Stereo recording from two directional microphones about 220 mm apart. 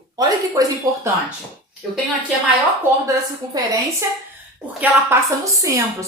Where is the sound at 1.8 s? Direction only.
Centre (ahead or behind).